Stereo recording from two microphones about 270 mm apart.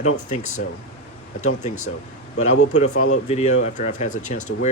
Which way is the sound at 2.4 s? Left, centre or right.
Left.